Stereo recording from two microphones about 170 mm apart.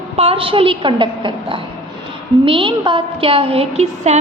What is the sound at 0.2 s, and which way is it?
A woman's voice, 35° right (ahead or behind).